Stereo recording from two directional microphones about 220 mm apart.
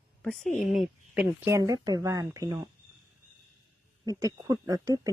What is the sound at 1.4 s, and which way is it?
Speech, 15° right (ahead or behind).